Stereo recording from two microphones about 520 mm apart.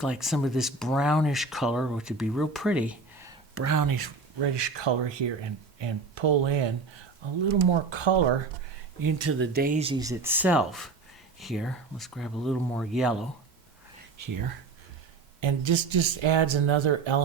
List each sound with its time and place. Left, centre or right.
0.0 s speech: centre
3.5 s speech: right
7.7 s speech: right
9.0 s speech: right; by 13.2 s centre
14.2 s speech: right
15.4 s speech: right